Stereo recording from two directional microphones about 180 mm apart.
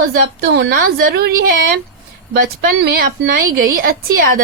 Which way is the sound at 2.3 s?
55° right (ahead or behind).